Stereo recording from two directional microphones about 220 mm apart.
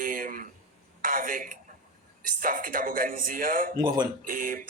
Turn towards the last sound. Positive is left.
turn(degrees=-40)  # may be behind; listen again after turning